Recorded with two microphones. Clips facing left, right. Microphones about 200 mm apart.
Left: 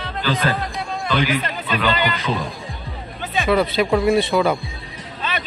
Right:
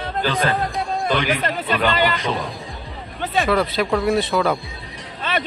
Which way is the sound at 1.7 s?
50° right (ahead or behind).